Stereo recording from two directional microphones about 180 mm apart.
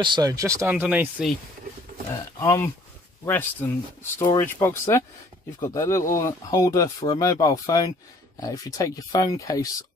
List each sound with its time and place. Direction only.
0.0 s speech: 25° right (ahead or behind); by 1.3 s 5° right (ahead or behind)
2.4 s speech: 15° left (ahead or behind)